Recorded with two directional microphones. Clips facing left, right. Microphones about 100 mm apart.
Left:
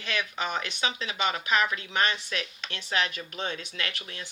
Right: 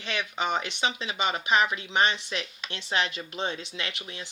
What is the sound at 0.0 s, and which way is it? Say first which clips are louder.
Speech: right 1 dB; 20° right (ahead or behind).